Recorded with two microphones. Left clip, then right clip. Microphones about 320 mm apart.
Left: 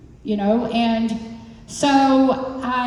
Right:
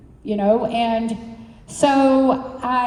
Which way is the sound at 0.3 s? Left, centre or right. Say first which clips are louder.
Right 3 dB; centre.